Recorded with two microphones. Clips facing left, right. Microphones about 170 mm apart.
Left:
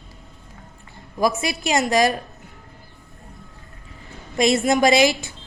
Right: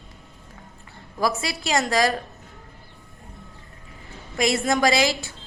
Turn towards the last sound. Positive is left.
turn(degrees=20)  # may be behind; listen again after turning